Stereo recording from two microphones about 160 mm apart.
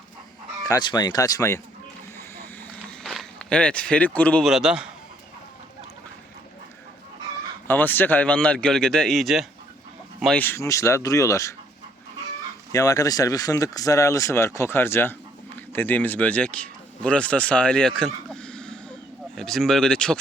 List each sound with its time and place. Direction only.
0.7 s speech: 25° left (ahead or behind)
3.0 s speech: centre (ahead or behind)
4.4 s speech: 5° right (ahead or behind)
7.7 s speech: 10° left (ahead or behind)
10.3 s speech: 15° left (ahead or behind)
12.7 s speech: 20° left (ahead or behind); by 20.1 s 5° left (ahead or behind)